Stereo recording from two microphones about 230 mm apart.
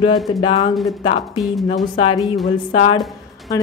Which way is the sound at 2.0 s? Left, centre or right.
Left.